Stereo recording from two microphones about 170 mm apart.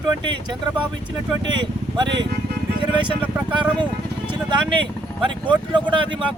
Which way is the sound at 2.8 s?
30° right (ahead or behind).